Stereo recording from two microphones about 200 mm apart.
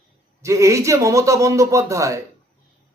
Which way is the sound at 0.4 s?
15° right (ahead or behind).